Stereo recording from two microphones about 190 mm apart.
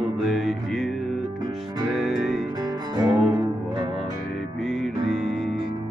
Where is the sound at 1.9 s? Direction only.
Centre (ahead or behind).